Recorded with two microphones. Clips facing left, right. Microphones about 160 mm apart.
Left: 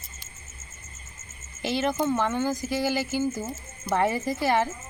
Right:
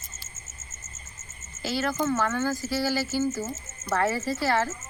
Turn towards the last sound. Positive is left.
turn(degrees=20)  # may be behind; listen again after turning